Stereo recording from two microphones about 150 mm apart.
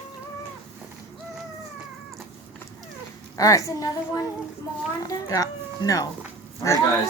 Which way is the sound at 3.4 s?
20° left (ahead or behind).